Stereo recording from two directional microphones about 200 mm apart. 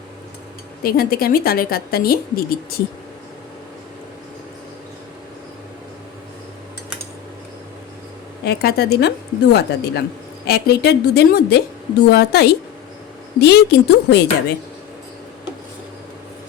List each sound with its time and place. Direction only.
0.8 s a woman's voice: 50° left (ahead or behind)
8.4 s a woman's voice: 55° left (ahead or behind)